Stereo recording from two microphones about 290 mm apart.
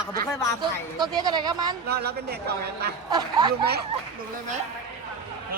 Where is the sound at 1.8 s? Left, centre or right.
Right.